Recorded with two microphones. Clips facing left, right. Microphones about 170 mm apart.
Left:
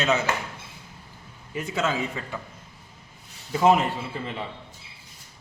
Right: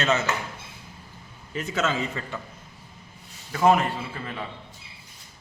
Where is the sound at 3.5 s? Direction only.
20° left (ahead or behind).